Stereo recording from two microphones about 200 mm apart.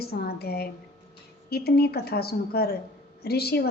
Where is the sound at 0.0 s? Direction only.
50° left (ahead or behind).